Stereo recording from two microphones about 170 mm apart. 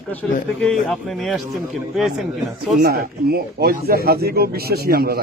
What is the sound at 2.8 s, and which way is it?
Speech, 65° right (ahead or behind).